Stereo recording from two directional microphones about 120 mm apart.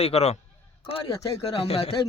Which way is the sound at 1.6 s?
55° left (ahead or behind).